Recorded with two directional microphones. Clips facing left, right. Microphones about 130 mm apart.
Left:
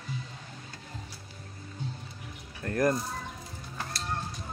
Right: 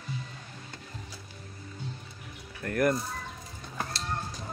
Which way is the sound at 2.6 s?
20° left (ahead or behind).